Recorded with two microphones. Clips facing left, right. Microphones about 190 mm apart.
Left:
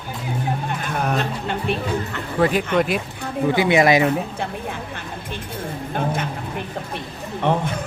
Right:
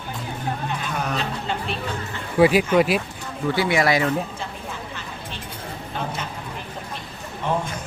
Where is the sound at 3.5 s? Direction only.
20° left (ahead or behind).